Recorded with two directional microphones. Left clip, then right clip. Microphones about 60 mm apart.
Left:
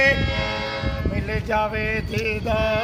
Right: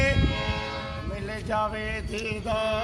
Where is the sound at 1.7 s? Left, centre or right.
Centre.